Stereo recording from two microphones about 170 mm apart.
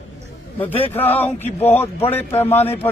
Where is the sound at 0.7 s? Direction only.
35° left (ahead or behind).